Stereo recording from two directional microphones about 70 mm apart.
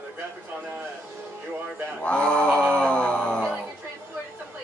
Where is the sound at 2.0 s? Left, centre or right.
Centre.